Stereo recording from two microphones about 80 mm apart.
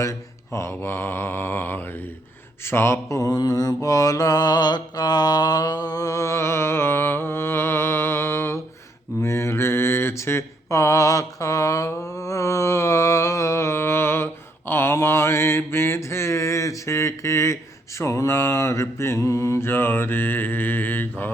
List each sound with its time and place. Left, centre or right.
0.0 s mantra: left